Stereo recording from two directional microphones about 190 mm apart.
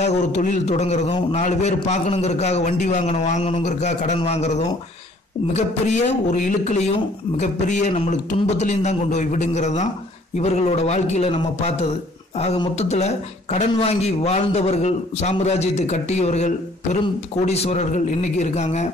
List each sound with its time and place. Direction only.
0.0 s a man's voice: 35° left (ahead or behind)